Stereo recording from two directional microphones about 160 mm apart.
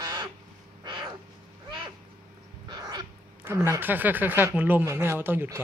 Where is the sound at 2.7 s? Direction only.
25° right (ahead or behind).